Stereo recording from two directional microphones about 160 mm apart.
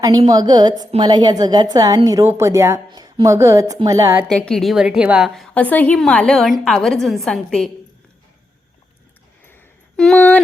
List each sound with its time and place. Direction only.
0.3 s a woman's voice: 25° right (ahead or behind)
4.3 s a woman's voice: 5° left (ahead or behind)
10.0 s a woman's voice: 5° left (ahead or behind)